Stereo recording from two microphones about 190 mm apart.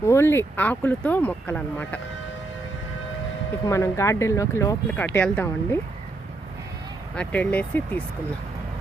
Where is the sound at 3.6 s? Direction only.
15° left (ahead or behind).